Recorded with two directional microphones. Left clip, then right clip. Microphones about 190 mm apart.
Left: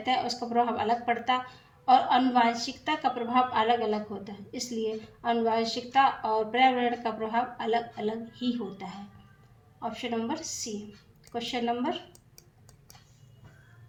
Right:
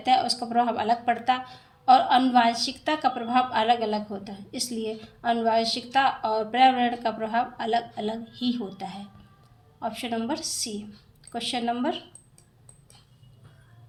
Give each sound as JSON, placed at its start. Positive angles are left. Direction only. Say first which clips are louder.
{"t": 0.0, "sound": "a woman's voice", "louder": "right 6 dB", "side_deg": -35}